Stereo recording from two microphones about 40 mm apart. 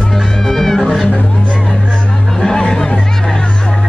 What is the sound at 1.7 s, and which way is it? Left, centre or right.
Hubbub, centre.